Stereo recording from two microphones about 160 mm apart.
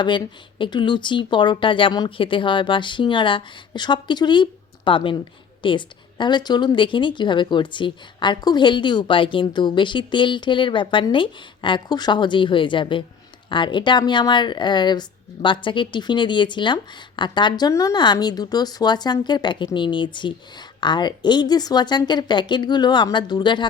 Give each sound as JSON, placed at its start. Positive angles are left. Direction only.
{"t": 0.0, "sound": "speech", "side_deg": 30}